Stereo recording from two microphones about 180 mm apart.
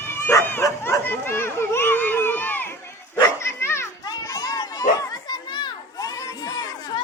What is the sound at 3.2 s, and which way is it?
Children playing, 15° left (ahead or behind).